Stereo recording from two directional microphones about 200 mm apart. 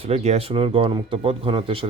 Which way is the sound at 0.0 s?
30° right (ahead or behind).